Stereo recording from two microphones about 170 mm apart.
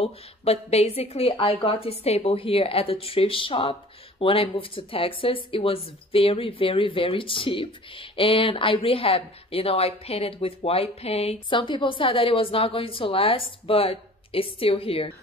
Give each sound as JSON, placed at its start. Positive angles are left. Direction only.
{"t": 0.0, "sound": "speech", "side_deg": 35}